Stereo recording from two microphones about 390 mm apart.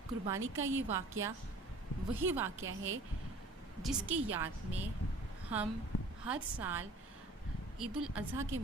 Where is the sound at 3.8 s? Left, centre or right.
Centre.